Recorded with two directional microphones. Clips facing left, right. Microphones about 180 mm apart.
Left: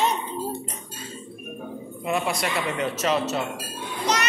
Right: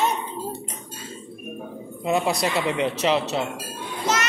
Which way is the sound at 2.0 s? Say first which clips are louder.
Right 3 dB; 25° right (ahead or behind).